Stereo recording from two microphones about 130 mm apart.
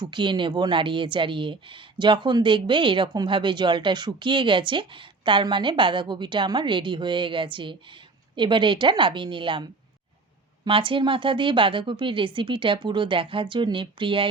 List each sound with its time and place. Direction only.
0.0 s a woman's voice: 35° right (ahead or behind)
10.7 s a woman's voice: 40° right (ahead or behind)